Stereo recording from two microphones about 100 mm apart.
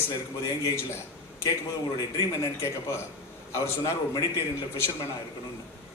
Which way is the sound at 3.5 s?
30° left (ahead or behind).